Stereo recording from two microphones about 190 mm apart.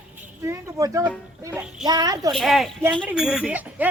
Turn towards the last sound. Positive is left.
turn(degrees=-5)  # may be behind; listen again after turning